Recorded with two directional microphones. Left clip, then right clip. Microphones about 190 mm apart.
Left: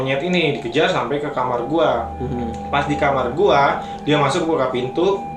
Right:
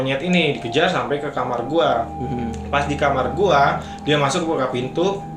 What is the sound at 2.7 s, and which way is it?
Speech, 45° right (ahead or behind).